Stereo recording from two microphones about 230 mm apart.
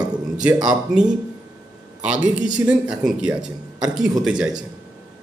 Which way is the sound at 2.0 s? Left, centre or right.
Centre.